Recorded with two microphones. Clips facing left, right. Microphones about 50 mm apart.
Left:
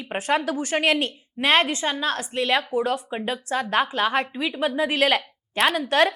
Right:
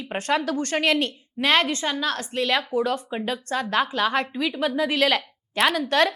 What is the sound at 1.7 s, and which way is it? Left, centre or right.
A woman's voice, centre.